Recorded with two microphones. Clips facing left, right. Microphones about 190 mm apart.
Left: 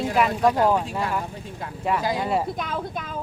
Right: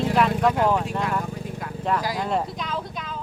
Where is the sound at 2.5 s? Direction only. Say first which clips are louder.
Left 2 dB; 50° left (ahead or behind).